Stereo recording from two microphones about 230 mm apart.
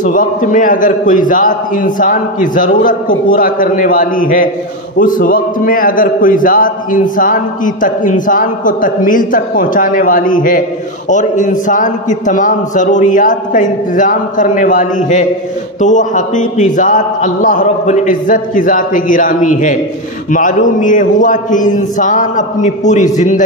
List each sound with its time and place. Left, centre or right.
0.0 s a man's voice: left